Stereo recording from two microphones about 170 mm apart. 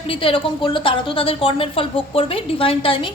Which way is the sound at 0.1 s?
30° left (ahead or behind).